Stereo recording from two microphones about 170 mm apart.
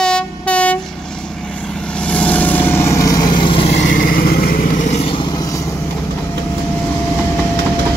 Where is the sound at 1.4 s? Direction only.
5° left (ahead or behind).